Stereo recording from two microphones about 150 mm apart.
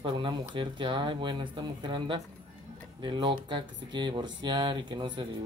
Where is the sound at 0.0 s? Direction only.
30° right (ahead or behind).